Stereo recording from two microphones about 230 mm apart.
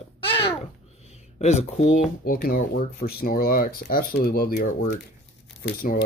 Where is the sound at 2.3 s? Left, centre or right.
Left.